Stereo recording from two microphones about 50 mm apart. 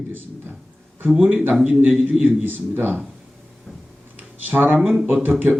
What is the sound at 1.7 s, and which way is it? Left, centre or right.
Speech, right.